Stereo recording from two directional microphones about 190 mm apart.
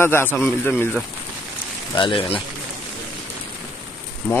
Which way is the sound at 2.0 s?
25° left (ahead or behind).